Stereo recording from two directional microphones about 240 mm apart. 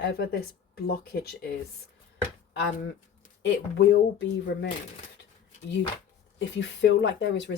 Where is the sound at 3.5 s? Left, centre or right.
Left.